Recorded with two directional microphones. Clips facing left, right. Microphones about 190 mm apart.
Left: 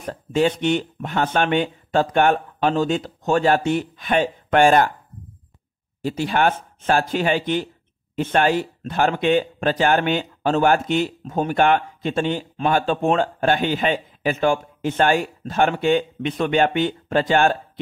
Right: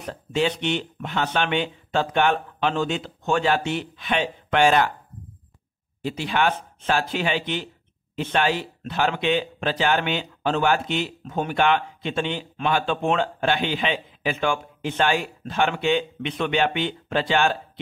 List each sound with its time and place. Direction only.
0.0 s speech: 45° left (ahead or behind)
6.0 s speech: 45° left (ahead or behind)